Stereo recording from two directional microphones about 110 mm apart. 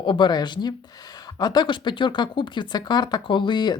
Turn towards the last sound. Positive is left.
turn(degrees=40)  # may be behind; listen again after turning